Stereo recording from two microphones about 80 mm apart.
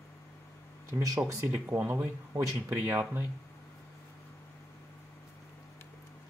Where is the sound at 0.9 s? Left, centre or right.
Right.